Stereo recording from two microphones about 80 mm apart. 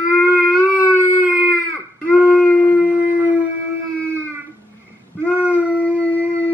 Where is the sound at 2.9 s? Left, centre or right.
Centre.